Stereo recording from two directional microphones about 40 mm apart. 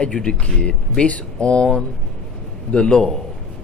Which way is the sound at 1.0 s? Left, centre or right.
Left.